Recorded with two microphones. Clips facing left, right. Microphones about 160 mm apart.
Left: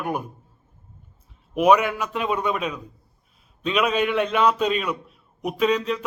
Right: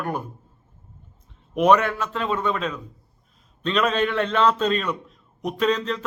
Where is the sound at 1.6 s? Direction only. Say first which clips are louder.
Even; 10° left (ahead or behind).